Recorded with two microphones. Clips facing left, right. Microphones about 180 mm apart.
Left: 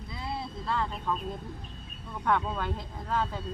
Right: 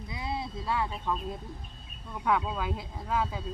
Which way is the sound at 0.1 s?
15° right (ahead or behind).